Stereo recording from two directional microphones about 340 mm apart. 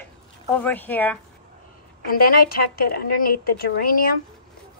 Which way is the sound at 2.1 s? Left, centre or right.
Left.